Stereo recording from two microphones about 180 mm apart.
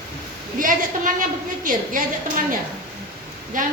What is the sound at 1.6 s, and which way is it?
A woman's voice, 45° right (ahead or behind).